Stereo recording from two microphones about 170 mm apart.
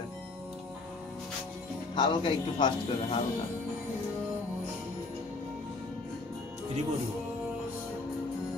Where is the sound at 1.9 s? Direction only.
25° left (ahead or behind).